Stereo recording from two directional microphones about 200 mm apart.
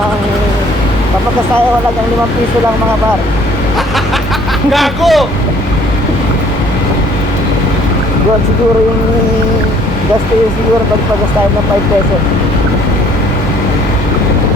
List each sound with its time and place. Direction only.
4.7 s a man's voice: centre (ahead or behind)